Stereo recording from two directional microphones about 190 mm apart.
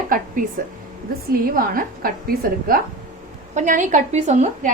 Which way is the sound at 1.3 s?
50° right (ahead or behind).